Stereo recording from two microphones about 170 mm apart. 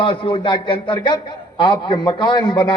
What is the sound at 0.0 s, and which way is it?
A man's voice, 30° left (ahead or behind).